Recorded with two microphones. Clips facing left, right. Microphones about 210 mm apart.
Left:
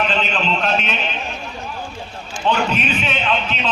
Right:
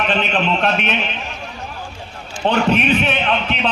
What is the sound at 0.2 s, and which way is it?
Speech, 55° right (ahead or behind).